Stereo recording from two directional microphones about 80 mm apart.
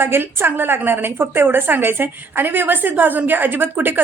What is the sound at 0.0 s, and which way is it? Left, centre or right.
A woman's voice, right.